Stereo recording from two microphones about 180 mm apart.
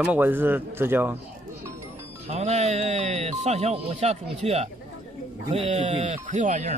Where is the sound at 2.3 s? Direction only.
35° right (ahead or behind).